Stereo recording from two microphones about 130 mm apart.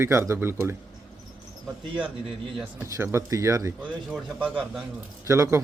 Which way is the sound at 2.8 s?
20° right (ahead or behind).